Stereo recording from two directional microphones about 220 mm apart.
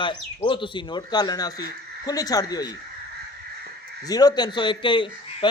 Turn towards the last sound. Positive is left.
turn(degrees=20)  # may be behind; listen again after turning